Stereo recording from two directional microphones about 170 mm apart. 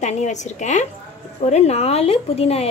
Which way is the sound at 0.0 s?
45° left (ahead or behind).